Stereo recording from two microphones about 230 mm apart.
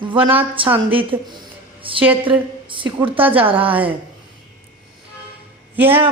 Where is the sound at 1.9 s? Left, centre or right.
Right.